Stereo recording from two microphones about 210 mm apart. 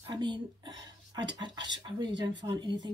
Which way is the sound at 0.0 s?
20° right (ahead or behind).